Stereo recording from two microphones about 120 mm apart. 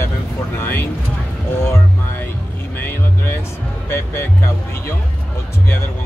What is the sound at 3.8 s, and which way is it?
Speech, 20° left (ahead or behind).